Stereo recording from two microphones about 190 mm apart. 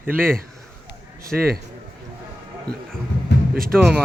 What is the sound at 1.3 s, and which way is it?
Speech, 5° right (ahead or behind).